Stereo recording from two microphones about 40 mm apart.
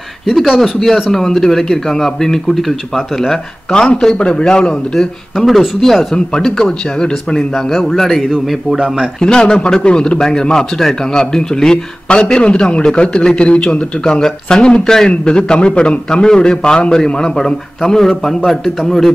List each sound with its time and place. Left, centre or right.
0.3 s speech: centre
3.7 s a man's voice: centre
4.9 s speech: centre
6.1 s speech: centre
8.6 s a man's voice: right
9.2 s a man's voice: centre